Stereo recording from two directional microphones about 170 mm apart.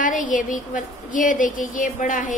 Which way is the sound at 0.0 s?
50° left (ahead or behind).